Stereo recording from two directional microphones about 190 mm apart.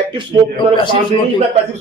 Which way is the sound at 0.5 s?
25° left (ahead or behind).